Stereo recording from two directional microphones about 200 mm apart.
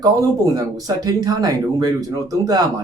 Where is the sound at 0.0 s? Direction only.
20° right (ahead or behind).